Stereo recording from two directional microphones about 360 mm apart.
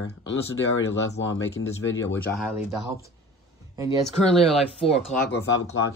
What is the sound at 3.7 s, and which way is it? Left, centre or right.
Speech, centre.